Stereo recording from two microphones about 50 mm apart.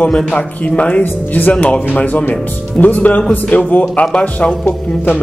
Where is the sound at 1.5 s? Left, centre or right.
Left.